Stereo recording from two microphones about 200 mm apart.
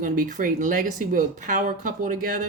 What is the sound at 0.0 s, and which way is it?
Speech, 40° right (ahead or behind).